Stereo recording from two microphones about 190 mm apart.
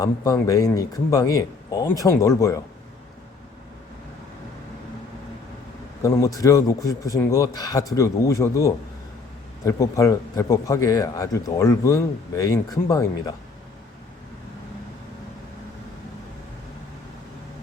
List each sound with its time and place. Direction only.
0.0 s speech: 20° left (ahead or behind)
6.0 s speech: 15° left (ahead or behind)